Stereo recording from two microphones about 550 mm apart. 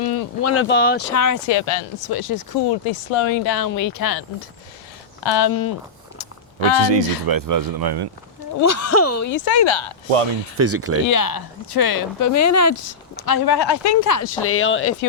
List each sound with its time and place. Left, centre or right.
0.4 s speech: left
1.1 s speech: left
1.5 s speech: left
2.0 s speech: left
2.8 s speech: left
3.4 s speech: left
5.2 s speech: left
6.8 s speech: right
7.3 s speech: right
8.6 s speech: left
10.6 s speech: right
11.0 s speech: left